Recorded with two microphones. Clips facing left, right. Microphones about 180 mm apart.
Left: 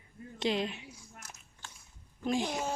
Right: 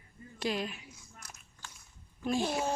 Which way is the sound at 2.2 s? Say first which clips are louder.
Even; 15° left (ahead or behind).